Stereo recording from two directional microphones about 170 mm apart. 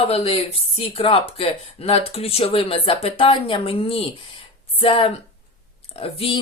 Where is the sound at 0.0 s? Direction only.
35° left (ahead or behind).